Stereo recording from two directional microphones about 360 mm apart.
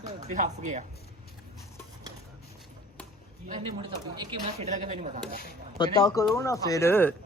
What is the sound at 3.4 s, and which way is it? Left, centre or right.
A man's voice, centre.